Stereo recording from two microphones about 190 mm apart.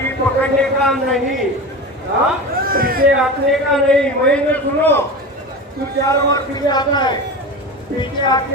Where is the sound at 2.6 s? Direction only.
50° right (ahead or behind).